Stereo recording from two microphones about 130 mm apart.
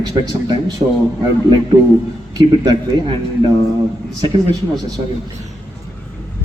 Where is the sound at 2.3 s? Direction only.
35° right (ahead or behind).